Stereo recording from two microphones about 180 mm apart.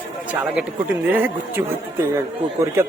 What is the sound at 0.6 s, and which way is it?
Speech, 10° right (ahead or behind).